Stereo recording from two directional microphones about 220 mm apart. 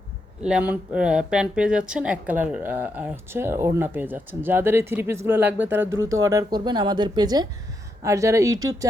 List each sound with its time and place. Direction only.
0.4 s speech: 5° right (ahead or behind)